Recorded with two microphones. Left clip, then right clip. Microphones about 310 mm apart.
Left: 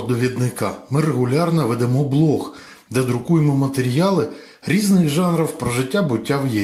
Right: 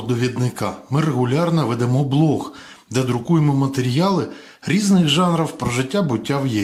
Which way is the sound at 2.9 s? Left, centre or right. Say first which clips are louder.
Left 1 dB; centre.